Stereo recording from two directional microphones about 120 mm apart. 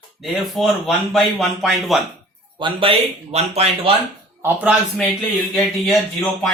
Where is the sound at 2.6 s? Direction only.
40° right (ahead or behind).